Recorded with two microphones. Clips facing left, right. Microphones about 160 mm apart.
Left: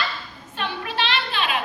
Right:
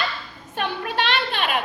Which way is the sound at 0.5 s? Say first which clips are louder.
Right 3 dB; 50° right (ahead or behind).